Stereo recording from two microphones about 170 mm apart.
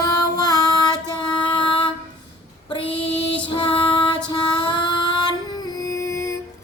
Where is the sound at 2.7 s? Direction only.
30° left (ahead or behind).